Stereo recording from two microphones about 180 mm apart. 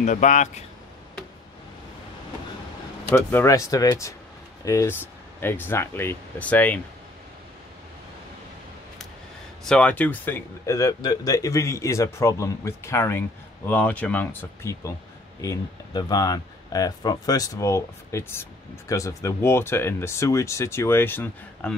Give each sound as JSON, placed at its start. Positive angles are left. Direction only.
{"t": 0.0, "sound": "speech", "side_deg": 45}
{"t": 3.1, "sound": "speech", "side_deg": 10}
{"t": 9.7, "sound": "speech", "side_deg": 5}